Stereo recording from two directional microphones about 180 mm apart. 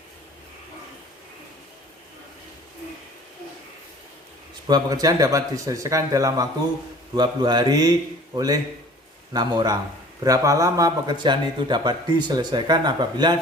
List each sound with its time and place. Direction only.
4.6 s a man's voice: 20° right (ahead or behind)
9.3 s a man's voice: 20° right (ahead or behind)